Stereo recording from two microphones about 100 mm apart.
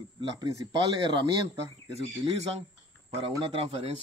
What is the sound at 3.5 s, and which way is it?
Speech, 90° right.